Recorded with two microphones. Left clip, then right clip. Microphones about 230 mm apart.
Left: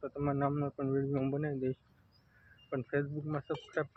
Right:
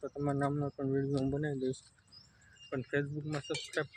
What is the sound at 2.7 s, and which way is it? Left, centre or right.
Speech, centre.